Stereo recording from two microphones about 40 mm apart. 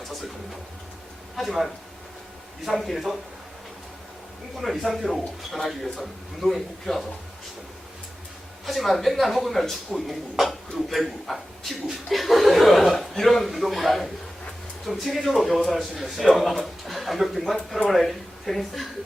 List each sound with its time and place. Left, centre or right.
1.4 s speech: centre
4.5 s speech: centre
8.6 s speech: centre